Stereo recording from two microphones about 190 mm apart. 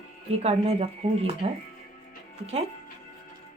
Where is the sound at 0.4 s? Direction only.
30° right (ahead or behind).